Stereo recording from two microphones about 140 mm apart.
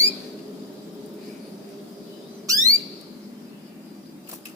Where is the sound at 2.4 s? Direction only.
25° right (ahead or behind).